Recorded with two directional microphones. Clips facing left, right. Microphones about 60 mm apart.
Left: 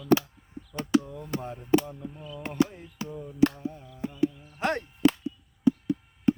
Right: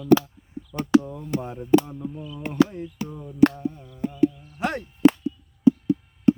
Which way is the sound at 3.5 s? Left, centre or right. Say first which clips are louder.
Right 5 dB; centre.